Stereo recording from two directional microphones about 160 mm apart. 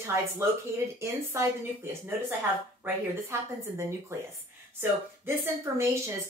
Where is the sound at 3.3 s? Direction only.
15° right (ahead or behind).